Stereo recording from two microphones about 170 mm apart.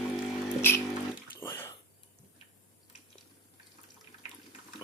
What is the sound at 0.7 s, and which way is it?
Music, 10° left (ahead or behind).